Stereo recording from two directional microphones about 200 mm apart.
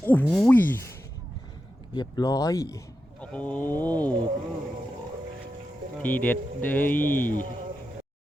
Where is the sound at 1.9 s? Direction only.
20° left (ahead or behind).